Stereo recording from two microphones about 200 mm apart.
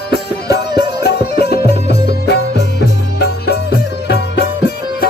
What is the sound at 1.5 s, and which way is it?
Music, 50° left (ahead or behind).